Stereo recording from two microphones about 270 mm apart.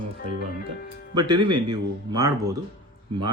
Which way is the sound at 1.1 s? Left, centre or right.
Centre.